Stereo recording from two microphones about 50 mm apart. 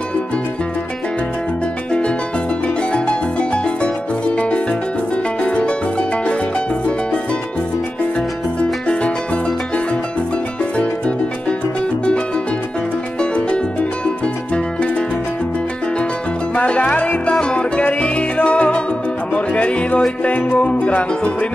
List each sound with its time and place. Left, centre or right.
1.9 s music: left
8.8 s music: left
10.6 s music: left
13.2 s music: left
16.5 s music: left